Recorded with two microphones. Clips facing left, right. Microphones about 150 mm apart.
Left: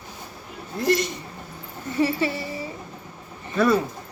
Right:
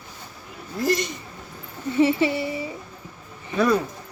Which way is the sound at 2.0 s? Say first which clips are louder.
Right 4 dB; 20° right (ahead or behind).